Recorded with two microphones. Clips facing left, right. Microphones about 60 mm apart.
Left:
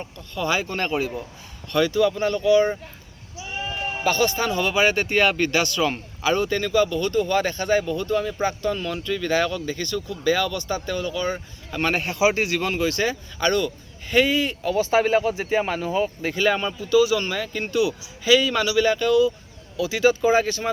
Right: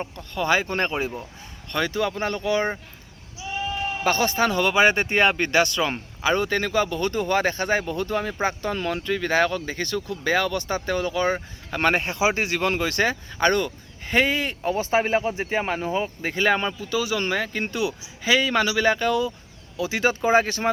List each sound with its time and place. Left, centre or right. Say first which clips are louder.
0.0 s speech: right 1 dB; right
4.0 s speech: even; right
11.3 s speech: even; right
12.6 s speech: right 1 dB; right